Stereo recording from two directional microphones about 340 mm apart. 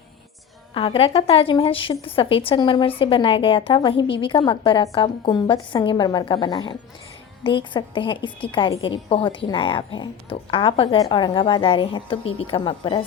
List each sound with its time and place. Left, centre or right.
0.7 s a woman's voice: centre